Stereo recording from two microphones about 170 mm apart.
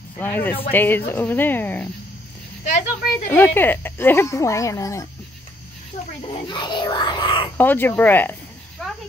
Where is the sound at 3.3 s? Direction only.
10° left (ahead or behind).